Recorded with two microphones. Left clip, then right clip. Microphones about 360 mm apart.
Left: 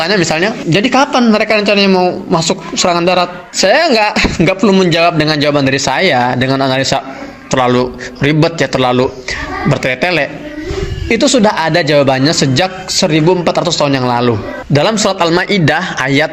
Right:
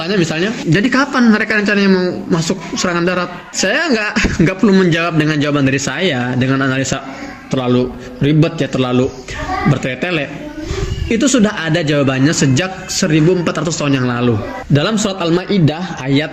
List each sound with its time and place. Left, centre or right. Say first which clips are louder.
0.0 s a man's voice: left 5 dB; centre